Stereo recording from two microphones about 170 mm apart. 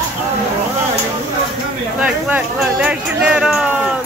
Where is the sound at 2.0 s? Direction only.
10° right (ahead or behind).